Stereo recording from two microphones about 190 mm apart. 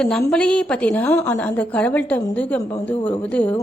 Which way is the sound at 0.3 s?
5° left (ahead or behind).